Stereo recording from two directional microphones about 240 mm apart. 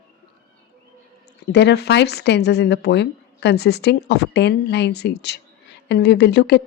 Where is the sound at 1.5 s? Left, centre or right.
Left.